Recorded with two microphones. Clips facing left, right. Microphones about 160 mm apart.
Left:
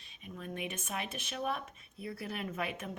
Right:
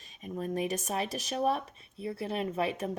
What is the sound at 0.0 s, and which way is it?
Speech, 40° right (ahead or behind).